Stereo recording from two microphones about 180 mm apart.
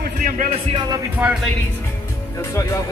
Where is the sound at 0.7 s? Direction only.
25° right (ahead or behind).